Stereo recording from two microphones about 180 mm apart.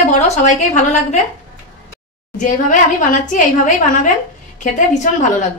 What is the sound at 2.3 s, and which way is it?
A woman's voice, 45° left (ahead or behind).